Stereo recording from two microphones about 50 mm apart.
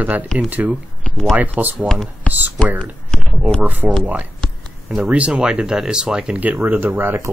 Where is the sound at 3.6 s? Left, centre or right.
Right.